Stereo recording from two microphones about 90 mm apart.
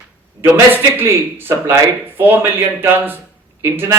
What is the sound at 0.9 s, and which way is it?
A man's voice, 25° right (ahead or behind).